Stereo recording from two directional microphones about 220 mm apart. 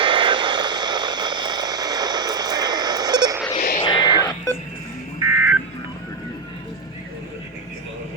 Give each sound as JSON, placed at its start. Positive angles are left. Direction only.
{"t": 0.0, "sound": "vehicle", "side_deg": -20}
{"t": 3.5, "sound": "a sound", "side_deg": 30}
{"t": 3.8, "sound": "music", "side_deg": 20}
{"t": 5.2, "sound": "fire alarm", "side_deg": -10}